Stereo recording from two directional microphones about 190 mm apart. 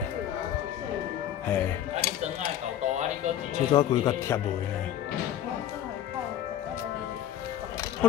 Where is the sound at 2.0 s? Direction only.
55° left (ahead or behind).